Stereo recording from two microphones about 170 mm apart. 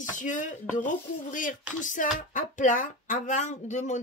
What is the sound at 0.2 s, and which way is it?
Speech, 50° left (ahead or behind).